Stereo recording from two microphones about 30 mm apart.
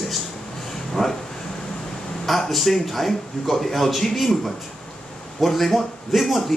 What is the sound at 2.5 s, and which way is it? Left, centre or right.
A man's voice, centre.